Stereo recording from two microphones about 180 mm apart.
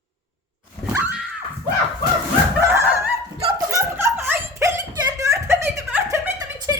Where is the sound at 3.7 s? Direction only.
15° right (ahead or behind).